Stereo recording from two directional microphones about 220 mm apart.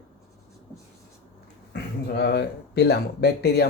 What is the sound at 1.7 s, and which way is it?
Speech, 50° left (ahead or behind).